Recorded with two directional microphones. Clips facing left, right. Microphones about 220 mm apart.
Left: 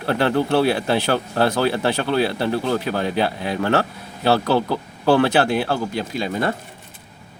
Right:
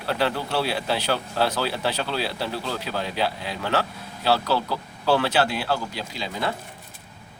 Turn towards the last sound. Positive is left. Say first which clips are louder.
# left 6 dB
turn(degrees=50)  # may be behind; listen again after turning